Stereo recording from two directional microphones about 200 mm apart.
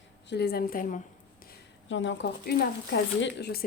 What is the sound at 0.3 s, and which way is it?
Speech, 55° left (ahead or behind).